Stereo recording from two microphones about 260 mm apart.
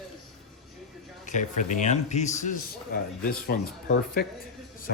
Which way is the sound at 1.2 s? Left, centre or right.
Left.